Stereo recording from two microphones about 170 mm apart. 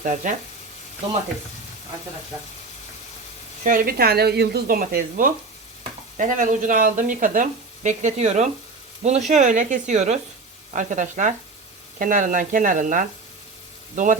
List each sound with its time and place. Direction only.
0.0 s speech: 50° right (ahead or behind)
3.6 s speech: 55° right (ahead or behind)